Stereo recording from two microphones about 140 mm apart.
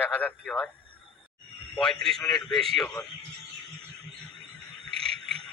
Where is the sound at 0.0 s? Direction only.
10° left (ahead or behind).